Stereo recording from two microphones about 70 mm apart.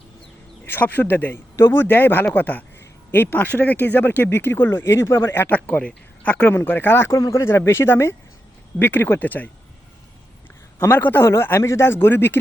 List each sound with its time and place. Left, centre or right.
0.6 s speech: left
5.5 s speech: left
7.1 s speech: left
10.8 s speech: left